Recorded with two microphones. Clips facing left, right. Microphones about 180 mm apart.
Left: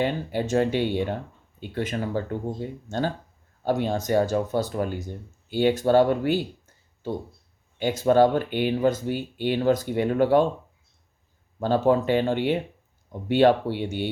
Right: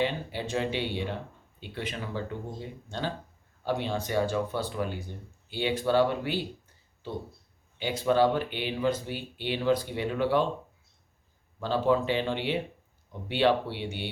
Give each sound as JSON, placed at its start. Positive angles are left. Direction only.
{"t": 0.0, "sound": "speech", "side_deg": 45}
{"t": 11.6, "sound": "speech", "side_deg": 50}